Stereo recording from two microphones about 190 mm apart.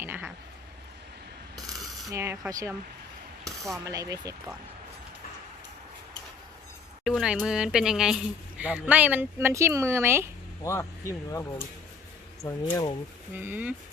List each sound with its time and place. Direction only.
0.0 s a sound: 10° right (ahead or behind)
2.1 s speech: 10° right (ahead or behind)
3.8 s speech: 20° right (ahead or behind)
7.0 s speech: centre (ahead or behind)
10.6 s speech: 15° left (ahead or behind)
13.3 s speech: 10° right (ahead or behind)